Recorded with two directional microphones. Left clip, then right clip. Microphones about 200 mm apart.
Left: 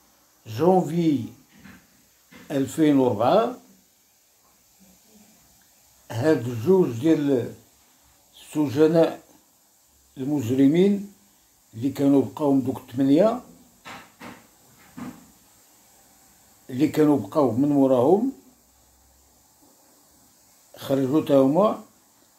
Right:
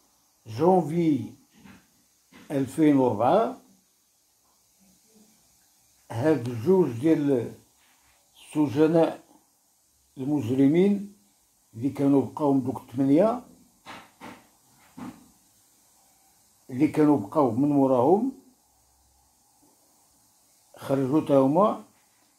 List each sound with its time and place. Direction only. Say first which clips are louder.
0.4 s speech: left 2 dB; 10° right (ahead or behind)
2.4 s speech: left 1 dB; 10° right (ahead or behind)
6.0 s speech: left 3 dB; 10° right (ahead or behind)
8.4 s speech: left 2 dB; 10° right (ahead or behind)
10.1 s speech: left 2 dB; 10° right (ahead or behind)
16.6 s speech: left 2 dB; 10° right (ahead or behind)
20.7 s speech: left 2 dB; 5° right (ahead or behind)